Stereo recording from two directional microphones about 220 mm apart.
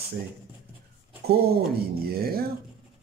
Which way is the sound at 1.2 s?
45° right (ahead or behind).